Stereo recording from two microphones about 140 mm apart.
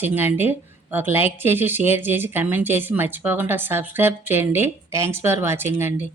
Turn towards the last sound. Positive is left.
turn(degrees=-15)  # may be behind; listen again after turning